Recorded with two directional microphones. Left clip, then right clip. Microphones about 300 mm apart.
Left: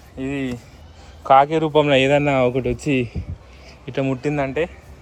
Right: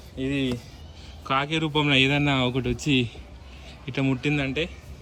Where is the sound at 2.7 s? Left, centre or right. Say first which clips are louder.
Left 3 dB; left.